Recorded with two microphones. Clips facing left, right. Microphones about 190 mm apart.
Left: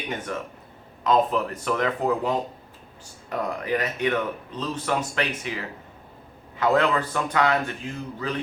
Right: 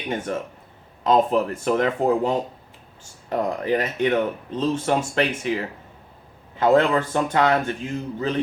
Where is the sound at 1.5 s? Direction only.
30° right (ahead or behind).